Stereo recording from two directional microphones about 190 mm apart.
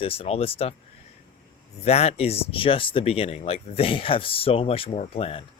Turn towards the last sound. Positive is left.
turn(degrees=30)  # may be behind; listen again after turning